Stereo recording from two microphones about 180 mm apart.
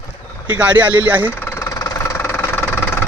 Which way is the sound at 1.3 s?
15° left (ahead or behind).